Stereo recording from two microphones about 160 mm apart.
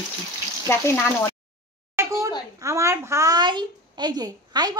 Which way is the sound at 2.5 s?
20° right (ahead or behind).